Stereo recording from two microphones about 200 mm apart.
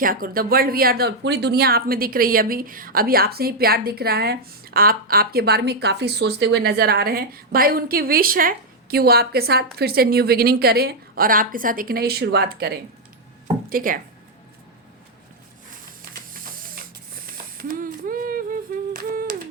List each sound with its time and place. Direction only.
0.0 s speech: 45° right (ahead or behind)
16.3 s spray: 45° right (ahead or behind)